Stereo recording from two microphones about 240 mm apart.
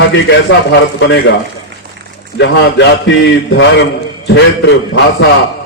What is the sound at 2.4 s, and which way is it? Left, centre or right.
Speech, left.